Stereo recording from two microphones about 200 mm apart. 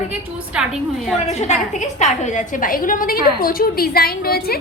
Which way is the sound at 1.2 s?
35° left (ahead or behind).